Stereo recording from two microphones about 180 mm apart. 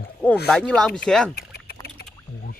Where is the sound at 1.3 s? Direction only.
60° left (ahead or behind).